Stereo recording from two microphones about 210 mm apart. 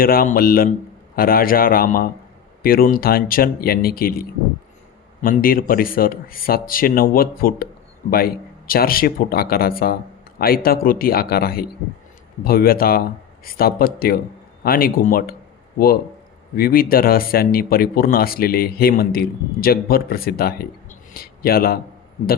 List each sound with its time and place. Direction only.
0.0 s speech: 45° left (ahead or behind)
16.6 s speech: 45° left (ahead or behind)
21.1 s a sound: 45° left (ahead or behind)